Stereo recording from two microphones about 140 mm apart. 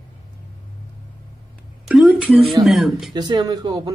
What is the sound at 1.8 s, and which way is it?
Speech, 5° right (ahead or behind).